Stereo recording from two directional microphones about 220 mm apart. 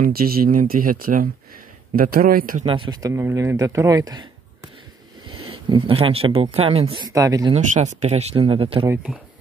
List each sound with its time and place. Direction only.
0.0 s speech: 40° right (ahead or behind)
2.6 s speech: 25° right (ahead or behind)
5.3 s speech: 25° right (ahead or behind)
7.5 s speech: 35° right (ahead or behind)
8.8 s speech: 5° right (ahead or behind)